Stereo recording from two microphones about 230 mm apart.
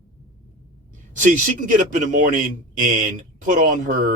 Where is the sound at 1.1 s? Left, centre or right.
Right.